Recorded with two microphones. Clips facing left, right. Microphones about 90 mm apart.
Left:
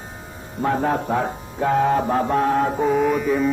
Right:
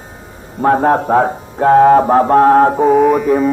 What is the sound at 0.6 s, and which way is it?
Mantra, 55° right (ahead or behind).